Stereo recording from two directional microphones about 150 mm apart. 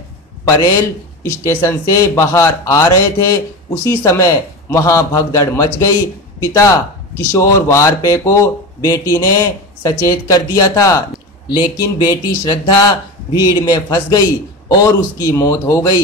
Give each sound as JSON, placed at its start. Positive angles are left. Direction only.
{"t": 0.5, "sound": "speech", "side_deg": 25}